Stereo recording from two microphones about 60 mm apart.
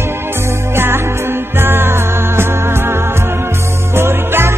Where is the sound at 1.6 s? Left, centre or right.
Right.